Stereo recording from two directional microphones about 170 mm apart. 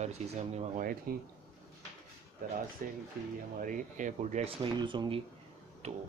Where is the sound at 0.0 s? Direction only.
40° right (ahead or behind).